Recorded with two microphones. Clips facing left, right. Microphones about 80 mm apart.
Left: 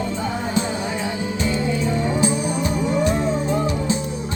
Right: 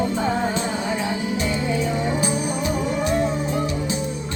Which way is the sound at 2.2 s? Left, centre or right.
Left.